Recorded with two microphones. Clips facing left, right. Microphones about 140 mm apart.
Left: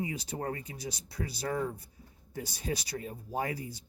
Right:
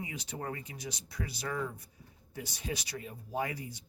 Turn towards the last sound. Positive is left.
turn(degrees=35)  # may be behind; listen again after turning